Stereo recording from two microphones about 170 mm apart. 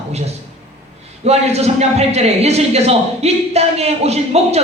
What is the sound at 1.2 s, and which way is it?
A man's voice, 40° right (ahead or behind).